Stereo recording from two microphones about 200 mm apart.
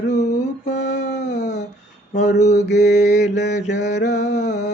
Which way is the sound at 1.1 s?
60° left (ahead or behind).